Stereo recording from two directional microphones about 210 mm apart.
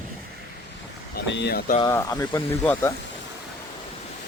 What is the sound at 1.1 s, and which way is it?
Speech, 55° left (ahead or behind).